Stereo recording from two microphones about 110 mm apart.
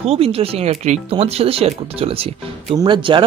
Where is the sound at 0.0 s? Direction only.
65° right (ahead or behind); by 1.0 s 85° right.